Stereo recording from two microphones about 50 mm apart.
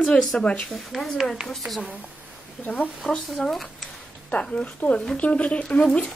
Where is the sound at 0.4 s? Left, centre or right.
Left.